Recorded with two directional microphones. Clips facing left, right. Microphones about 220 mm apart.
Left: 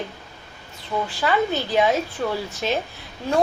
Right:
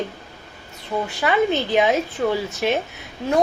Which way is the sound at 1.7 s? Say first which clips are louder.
Even; 20° right (ahead or behind).